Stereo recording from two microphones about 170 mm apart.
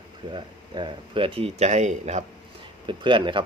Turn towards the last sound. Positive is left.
turn(degrees=-30)  # may be behind; listen again after turning